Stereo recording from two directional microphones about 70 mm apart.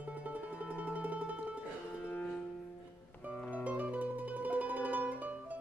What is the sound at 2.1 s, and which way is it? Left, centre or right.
Music, left.